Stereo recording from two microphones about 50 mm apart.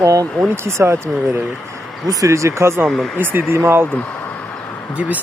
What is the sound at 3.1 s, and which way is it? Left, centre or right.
Speech, right.